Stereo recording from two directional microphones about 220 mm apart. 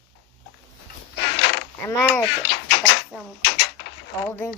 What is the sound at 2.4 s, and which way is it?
Speech, 50° left (ahead or behind).